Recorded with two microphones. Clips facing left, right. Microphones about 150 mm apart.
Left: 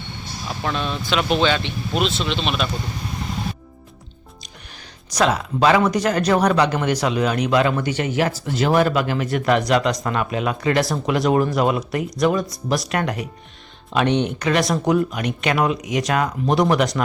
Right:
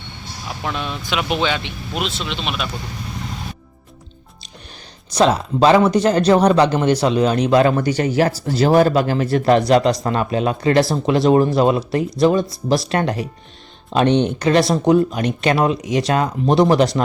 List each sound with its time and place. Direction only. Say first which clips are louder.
0.4 s speech: left 1 dB; 10° right (ahead or behind)
5.1 s a man's voice: right 4 dB; 30° right (ahead or behind)